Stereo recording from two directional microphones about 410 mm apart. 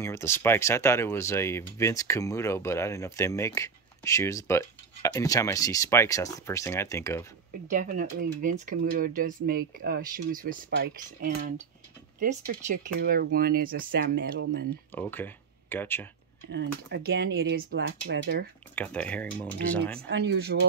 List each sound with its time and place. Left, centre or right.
0.0 s speech: centre
7.7 s speech: centre
14.9 s speech: centre
16.4 s speech: right
18.8 s speech: centre
20.1 s speech: right